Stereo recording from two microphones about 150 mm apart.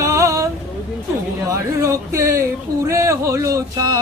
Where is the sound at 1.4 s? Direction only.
20° right (ahead or behind).